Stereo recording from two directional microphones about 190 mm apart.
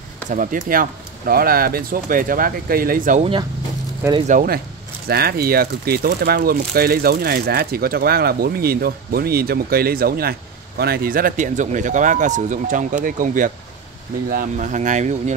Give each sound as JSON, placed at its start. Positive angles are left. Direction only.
{"t": 0.3, "sound": "speech", "side_deg": -45}
{"t": 4.3, "sound": "speech", "side_deg": -45}